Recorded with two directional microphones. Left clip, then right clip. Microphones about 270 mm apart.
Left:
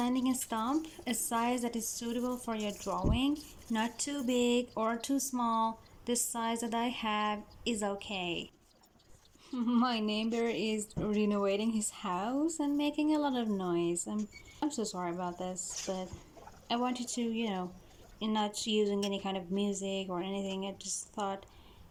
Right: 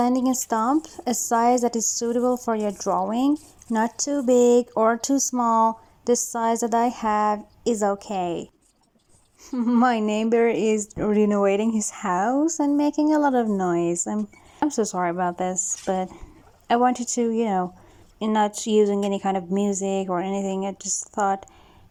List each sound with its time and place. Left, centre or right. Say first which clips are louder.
0.0 s speech: right 11 dB; right
4.3 s speech: right 14 dB; right
4.7 s speech: right 13 dB; right
11.8 s speech: right 10 dB; right
12.0 s speech: right 12 dB; right